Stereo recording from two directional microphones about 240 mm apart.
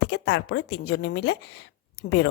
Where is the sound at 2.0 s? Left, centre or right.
Left.